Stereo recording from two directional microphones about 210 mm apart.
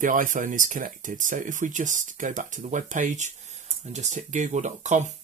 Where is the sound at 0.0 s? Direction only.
40° right (ahead or behind).